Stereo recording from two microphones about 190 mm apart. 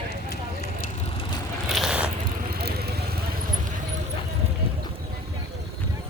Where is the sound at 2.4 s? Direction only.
55° right (ahead or behind).